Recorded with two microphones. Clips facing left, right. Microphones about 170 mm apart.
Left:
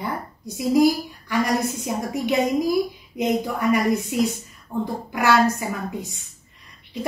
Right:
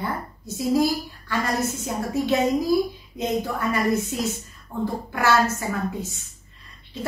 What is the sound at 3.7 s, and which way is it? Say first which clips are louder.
A woman's voice: left 3 dB; 15° left (ahead or behind).